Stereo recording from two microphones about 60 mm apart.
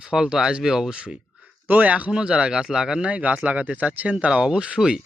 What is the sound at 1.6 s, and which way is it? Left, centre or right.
Speech, right.